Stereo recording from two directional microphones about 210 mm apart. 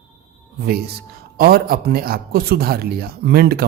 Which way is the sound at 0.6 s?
50° right (ahead or behind).